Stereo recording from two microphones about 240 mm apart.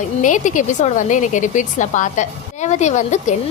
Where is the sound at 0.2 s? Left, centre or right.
Left.